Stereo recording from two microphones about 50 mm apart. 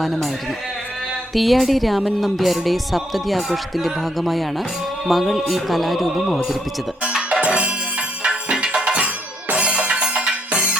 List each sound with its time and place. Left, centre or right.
0.0 s speech: centre
1.3 s speech: centre
7.1 s music: centre
7.4 s music: right